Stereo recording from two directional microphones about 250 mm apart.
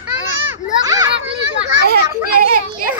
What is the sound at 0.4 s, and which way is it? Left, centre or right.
Children playing, centre.